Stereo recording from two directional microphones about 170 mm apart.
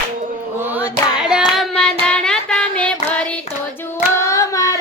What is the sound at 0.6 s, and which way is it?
Child singing, 10° right (ahead or behind).